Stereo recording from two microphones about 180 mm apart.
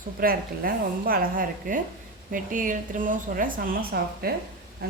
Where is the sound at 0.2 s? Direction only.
55° right (ahead or behind).